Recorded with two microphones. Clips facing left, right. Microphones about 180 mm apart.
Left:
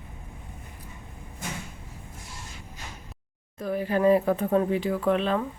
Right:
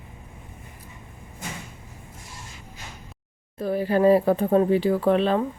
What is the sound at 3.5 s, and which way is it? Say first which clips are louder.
Speech: right 4 dB; 30° right (ahead or behind).